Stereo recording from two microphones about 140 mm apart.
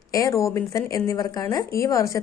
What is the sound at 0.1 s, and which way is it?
Speech, 20° left (ahead or behind).